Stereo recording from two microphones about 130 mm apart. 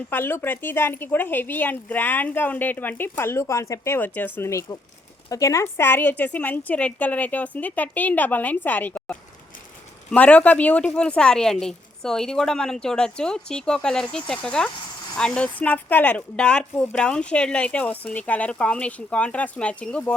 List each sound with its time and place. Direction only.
0.1 s a woman's voice: 15° left (ahead or behind)